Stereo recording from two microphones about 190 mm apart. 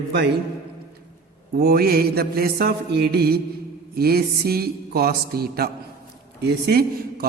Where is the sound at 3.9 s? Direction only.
55° right (ahead or behind).